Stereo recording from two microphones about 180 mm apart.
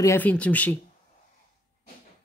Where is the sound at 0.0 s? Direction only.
10° left (ahead or behind).